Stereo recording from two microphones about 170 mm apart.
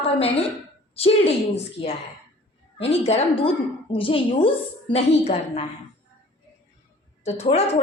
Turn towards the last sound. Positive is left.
turn(degrees=40)  # may be behind; listen again after turning